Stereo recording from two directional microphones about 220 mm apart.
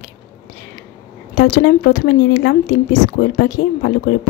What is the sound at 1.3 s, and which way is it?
A woman's voice, 45° left (ahead or behind).